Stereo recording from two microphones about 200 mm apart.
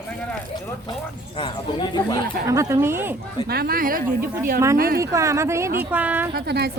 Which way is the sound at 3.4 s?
50° right (ahead or behind).